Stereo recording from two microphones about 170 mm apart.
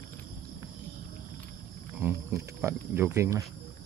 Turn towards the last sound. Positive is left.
turn(degrees=-15)  # may be behind; listen again after turning